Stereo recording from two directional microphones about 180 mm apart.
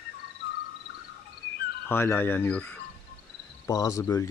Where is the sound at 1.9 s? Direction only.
10° left (ahead or behind).